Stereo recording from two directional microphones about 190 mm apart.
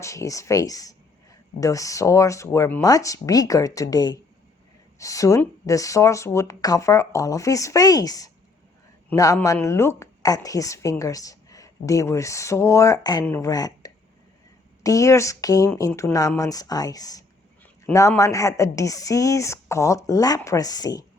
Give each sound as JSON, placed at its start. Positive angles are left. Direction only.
{"t": 0.0, "sound": "speech", "side_deg": 15}